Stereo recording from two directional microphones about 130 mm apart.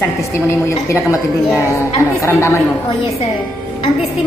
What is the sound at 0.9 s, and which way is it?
A woman's voice, 25° left (ahead or behind).